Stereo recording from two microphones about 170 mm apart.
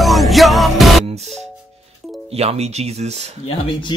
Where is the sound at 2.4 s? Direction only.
40° right (ahead or behind).